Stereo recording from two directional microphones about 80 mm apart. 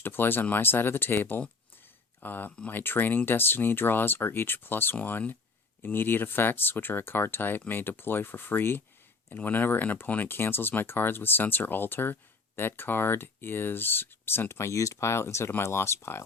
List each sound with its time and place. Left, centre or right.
0.0 s speech: left